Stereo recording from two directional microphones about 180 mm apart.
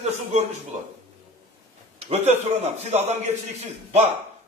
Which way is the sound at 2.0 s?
35° right (ahead or behind).